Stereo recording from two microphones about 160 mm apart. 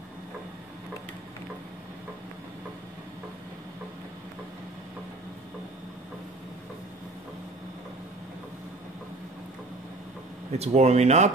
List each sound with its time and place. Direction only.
10.5 s speech: 40° right (ahead or behind)